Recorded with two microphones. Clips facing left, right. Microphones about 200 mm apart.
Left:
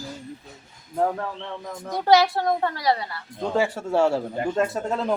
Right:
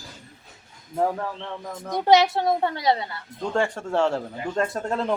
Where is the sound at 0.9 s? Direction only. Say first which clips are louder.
Even; 5° right (ahead or behind).